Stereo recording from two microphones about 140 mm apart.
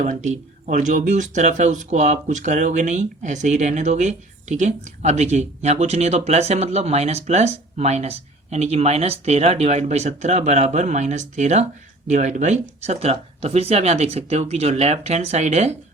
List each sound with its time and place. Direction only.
0.0 s speech: 60° right (ahead or behind)